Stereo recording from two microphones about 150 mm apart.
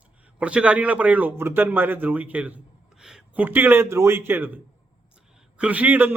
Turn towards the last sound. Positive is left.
turn(degrees=-10)  # may be behind; listen again after turning